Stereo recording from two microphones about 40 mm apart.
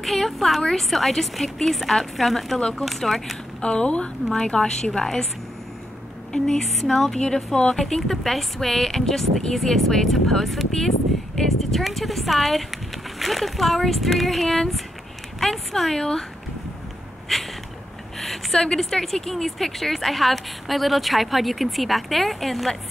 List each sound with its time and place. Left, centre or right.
0.0 s a woman's voice: centre
3.6 s speech: left
4.5 s speech: centre
6.6 s speech: centre
7.2 s a woman's voice: centre
17.3 s a sound: centre
18.8 s a woman's voice: centre